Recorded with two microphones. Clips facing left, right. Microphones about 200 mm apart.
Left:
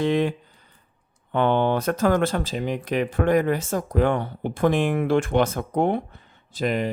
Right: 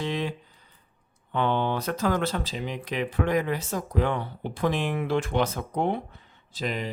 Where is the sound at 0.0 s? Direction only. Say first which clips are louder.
Left 8 dB; 55° left (ahead or behind).